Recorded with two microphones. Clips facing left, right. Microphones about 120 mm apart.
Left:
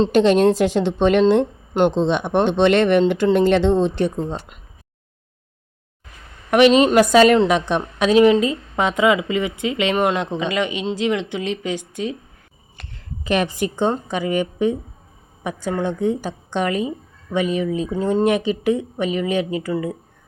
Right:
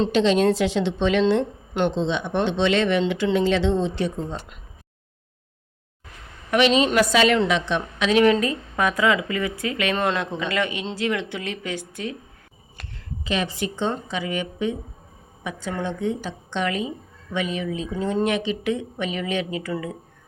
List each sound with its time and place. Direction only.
0.1 s a woman's voice: 50° left (ahead or behind)
3.0 s a woman's voice: 45° left (ahead or behind)
6.5 s a woman's voice: 50° left (ahead or behind)
8.1 s speech: 25° left (ahead or behind)
13.2 s a woman's voice: 55° left (ahead or behind); by 19.9 s 30° left (ahead or behind)